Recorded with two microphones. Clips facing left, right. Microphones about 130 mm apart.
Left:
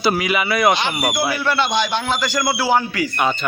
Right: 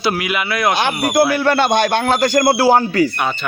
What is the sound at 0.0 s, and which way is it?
Speech, centre (ahead or behind).